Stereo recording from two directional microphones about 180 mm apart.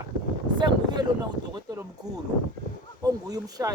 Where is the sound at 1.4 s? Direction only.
25° left (ahead or behind).